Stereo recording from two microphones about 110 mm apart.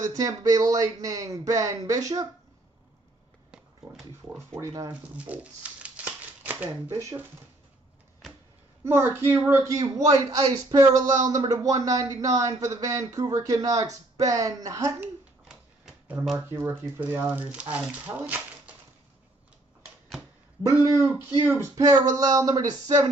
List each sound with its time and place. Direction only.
0.0 s speech: 30° right (ahead or behind)
4.6 s speech: 30° right (ahead or behind)
5.1 s a sound: 10° right (ahead or behind)
6.9 s speech: 30° right (ahead or behind)
8.8 s speech: 20° right (ahead or behind)
15.0 s a sound: 10° right (ahead or behind)
16.4 s speech: 20° right (ahead or behind)
20.8 s speech: 30° right (ahead or behind)